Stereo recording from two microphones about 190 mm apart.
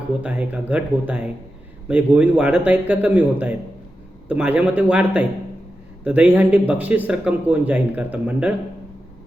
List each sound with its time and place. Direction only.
0.2 s speech: 5° right (ahead or behind)